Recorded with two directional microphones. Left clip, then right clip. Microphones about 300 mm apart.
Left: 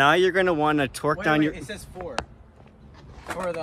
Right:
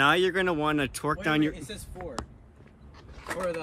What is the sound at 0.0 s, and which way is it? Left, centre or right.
Speech, centre.